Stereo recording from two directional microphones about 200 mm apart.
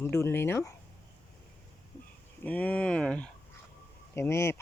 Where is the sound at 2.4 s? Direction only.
5° left (ahead or behind).